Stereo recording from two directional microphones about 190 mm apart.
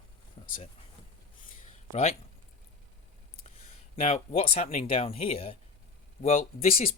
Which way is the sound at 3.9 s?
30° left (ahead or behind).